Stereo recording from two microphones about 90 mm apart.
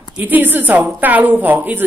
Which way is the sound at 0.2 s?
20° right (ahead or behind).